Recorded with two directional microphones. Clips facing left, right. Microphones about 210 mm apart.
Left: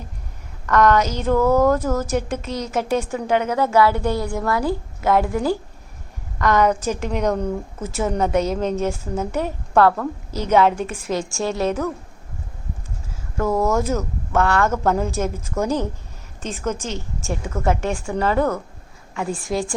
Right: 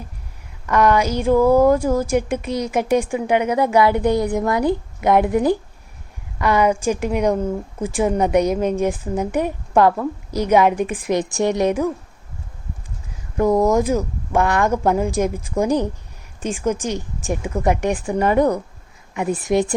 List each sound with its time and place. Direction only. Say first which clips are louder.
0.7 s a woman's voice: even; 10° right (ahead or behind)
13.3 s a woman's voice: right 4 dB; 15° right (ahead or behind)